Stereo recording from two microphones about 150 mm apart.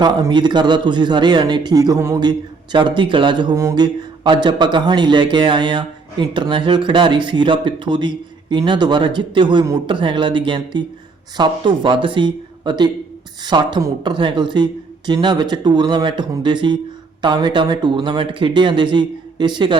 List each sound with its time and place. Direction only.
0.0 s speech: 30° right (ahead or behind)
2.7 s speech: 30° right (ahead or behind)
3.5 s speech: 20° right (ahead or behind)